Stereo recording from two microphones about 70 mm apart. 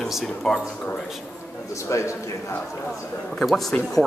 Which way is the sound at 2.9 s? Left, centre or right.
Centre.